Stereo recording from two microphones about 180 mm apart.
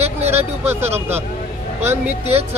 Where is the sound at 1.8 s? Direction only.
10° right (ahead or behind).